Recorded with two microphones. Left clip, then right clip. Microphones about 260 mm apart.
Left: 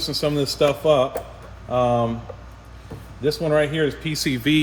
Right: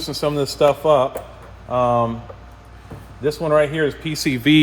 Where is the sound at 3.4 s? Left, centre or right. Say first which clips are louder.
Right 4 dB; right.